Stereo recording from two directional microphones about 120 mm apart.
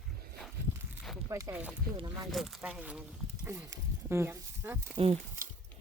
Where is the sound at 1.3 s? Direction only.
25° right (ahead or behind).